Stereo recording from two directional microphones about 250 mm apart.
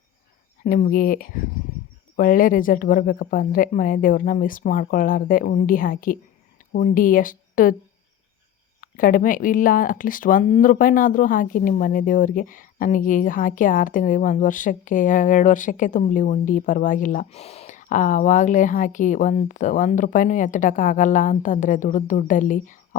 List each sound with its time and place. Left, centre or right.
0.6 s speech: left
8.8 s speech: left